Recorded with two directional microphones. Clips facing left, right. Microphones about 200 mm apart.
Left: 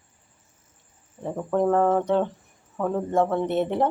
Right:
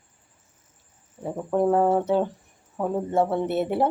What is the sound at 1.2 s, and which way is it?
Speech, 10° right (ahead or behind).